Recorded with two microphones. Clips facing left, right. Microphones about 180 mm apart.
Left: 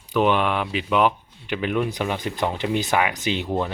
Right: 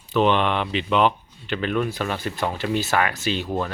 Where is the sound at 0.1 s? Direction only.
10° left (ahead or behind).